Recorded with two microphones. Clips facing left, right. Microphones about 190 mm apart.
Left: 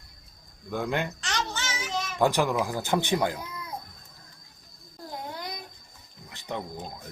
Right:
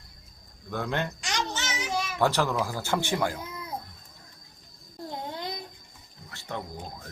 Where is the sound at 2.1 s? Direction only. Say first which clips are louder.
Left 2 dB; 15° left (ahead or behind).